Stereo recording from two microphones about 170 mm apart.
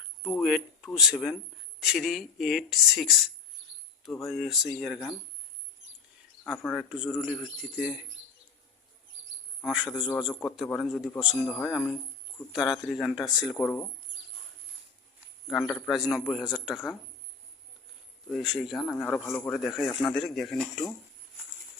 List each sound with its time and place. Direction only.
0.3 s speech: centre (ahead or behind)
3.6 s cricket: 90° right
4.0 s speech: centre (ahead or behind)
6.6 s speech: 5° left (ahead or behind)
6.9 s speech: 5° right (ahead or behind)
9.6 s speech: centre (ahead or behind)
15.4 s speech: centre (ahead or behind)
18.3 s speech: centre (ahead or behind)
18.8 s speech: 15° left (ahead or behind)